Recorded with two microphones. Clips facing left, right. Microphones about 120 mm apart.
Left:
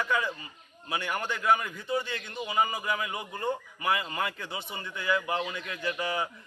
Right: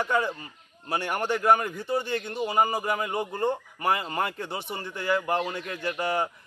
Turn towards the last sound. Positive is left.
turn(degrees=-40)  # may be behind; listen again after turning